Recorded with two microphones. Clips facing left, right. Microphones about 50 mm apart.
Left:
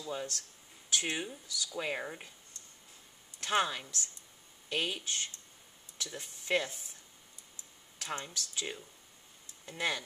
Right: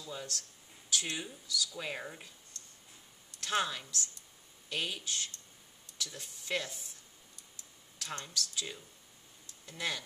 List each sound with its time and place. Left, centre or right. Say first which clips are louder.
0.1 s speech: left 4 dB; left
3.3 s speech: left 2 dB; left
8.0 s speech: left 1 dB; left